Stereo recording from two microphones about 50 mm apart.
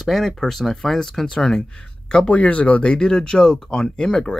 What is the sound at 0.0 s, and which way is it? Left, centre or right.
Speech, centre.